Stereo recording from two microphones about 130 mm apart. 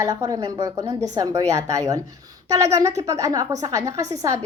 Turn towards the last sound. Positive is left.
turn(degrees=-25)  # may be behind; listen again after turning